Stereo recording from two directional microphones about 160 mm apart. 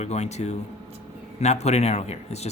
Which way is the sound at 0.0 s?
45° left (ahead or behind).